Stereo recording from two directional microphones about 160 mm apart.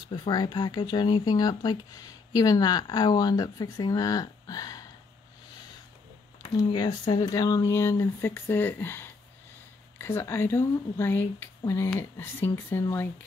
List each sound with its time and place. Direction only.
0.1 s speech: 25° left (ahead or behind)
6.7 s speech: 25° left (ahead or behind)